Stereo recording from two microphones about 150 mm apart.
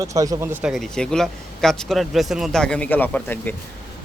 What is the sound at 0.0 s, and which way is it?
Speech, 20° right (ahead or behind).